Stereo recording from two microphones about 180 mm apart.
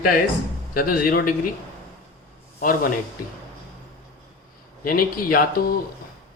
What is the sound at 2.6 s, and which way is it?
Speech, 50° left (ahead or behind).